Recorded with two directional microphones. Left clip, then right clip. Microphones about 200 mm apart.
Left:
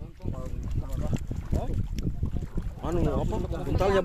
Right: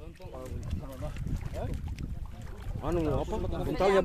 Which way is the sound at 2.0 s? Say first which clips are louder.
Left 9 dB; 50° left (ahead or behind).